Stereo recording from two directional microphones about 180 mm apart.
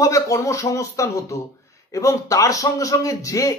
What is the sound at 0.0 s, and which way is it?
A man's voice, 20° left (ahead or behind).